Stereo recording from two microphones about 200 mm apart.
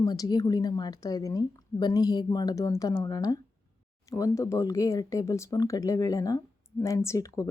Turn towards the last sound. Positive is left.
turn(degrees=15)  # may be behind; listen again after turning